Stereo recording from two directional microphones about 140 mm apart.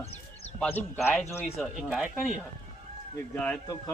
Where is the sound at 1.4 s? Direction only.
Centre (ahead or behind).